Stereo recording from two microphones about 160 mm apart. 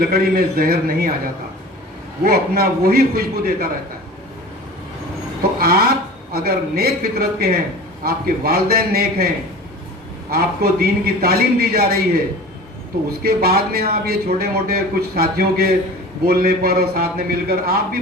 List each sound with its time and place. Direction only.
0.0 s speech: 70° right (ahead or behind)
2.2 s speech: 70° right (ahead or behind)
5.5 s a sound: 70° right (ahead or behind)
6.3 s speech: 70° right (ahead or behind)
10.3 s speech: 75° right (ahead or behind)
13.2 s speech: 70° right (ahead or behind)